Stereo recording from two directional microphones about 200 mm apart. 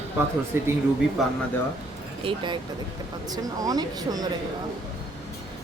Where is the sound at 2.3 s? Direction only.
25° right (ahead or behind).